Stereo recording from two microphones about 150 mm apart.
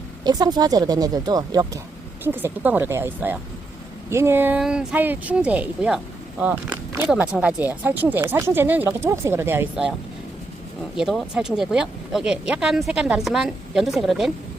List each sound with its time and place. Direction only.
0.3 s speech: 25° right (ahead or behind)
2.2 s speech: 15° right (ahead or behind)
10.9 s speech: centre (ahead or behind)